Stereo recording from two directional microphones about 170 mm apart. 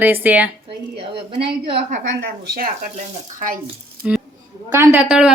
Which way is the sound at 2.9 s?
45° right (ahead or behind).